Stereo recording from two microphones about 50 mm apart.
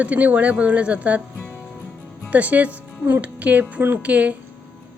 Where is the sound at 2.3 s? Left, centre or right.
Right.